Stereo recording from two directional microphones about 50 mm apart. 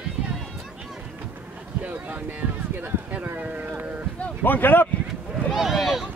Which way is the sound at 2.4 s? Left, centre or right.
Right.